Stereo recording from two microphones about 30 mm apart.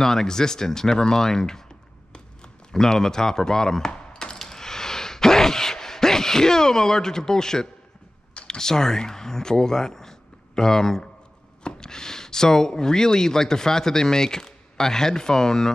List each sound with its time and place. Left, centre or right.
0.0 s speech: centre
2.7 s speech: centre
3.9 s a sound: left
8.5 s speech: left